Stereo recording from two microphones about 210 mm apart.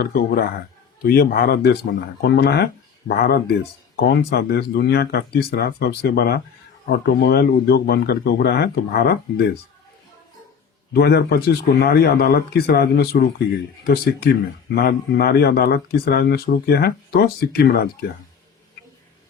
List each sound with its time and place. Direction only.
0.1 s speech: 45° left (ahead or behind)
10.9 s speech: 50° left (ahead or behind)